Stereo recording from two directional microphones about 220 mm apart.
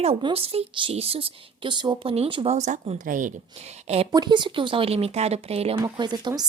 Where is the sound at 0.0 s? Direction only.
25° right (ahead or behind).